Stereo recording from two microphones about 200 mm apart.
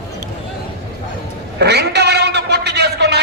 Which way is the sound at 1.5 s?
55° right (ahead or behind).